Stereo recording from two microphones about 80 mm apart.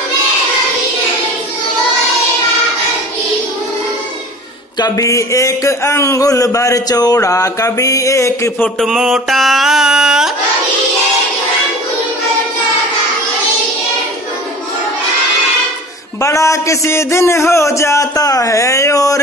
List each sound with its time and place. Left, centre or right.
4.7 s speech: left
5.0 s a man's voice: left
8.8 s mantra: centre
16.2 s a man's voice: left